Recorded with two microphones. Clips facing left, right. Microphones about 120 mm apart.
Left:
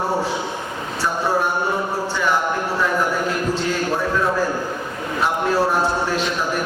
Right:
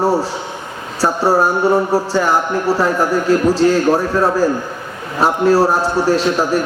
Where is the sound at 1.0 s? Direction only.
40° right (ahead or behind).